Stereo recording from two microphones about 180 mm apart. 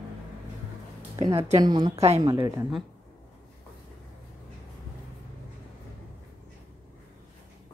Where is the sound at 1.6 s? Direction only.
25° right (ahead or behind).